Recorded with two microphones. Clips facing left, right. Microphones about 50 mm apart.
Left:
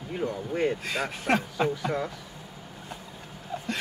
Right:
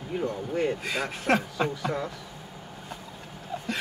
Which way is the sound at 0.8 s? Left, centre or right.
Centre.